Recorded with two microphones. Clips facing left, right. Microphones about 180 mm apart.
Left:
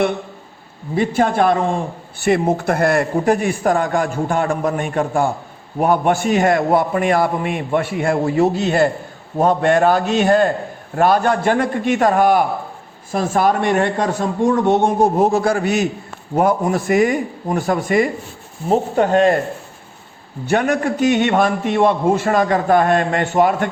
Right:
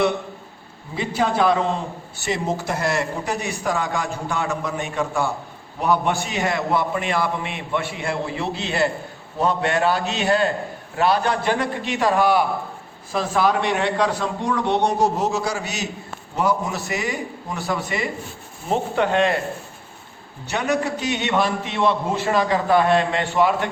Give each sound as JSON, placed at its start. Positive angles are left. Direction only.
{"t": 0.9, "sound": "a man's voice", "side_deg": 50}
{"t": 20.5, "sound": "a man's voice", "side_deg": 50}